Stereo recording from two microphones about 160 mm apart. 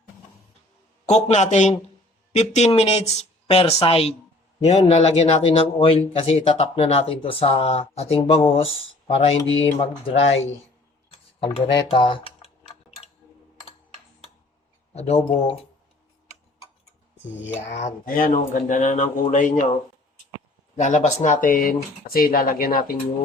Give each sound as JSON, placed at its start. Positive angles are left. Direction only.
{"t": 1.0, "sound": "speech", "side_deg": 45}
{"t": 11.1, "sound": "speech", "side_deg": 35}
{"t": 14.9, "sound": "speech", "side_deg": 40}
{"t": 17.7, "sound": "speech", "side_deg": 45}
{"t": 18.0, "sound": "speech", "side_deg": 55}
{"t": 20.7, "sound": "speech", "side_deg": 50}